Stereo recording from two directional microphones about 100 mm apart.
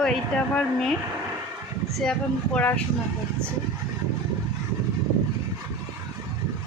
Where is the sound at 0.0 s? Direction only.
5° left (ahead or behind).